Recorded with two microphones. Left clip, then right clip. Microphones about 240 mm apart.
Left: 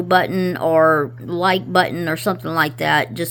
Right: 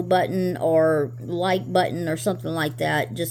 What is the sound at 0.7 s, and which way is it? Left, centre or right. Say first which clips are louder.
Speech: left 6 dB; left.